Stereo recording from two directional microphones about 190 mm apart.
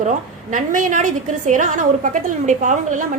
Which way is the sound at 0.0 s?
40° right (ahead or behind).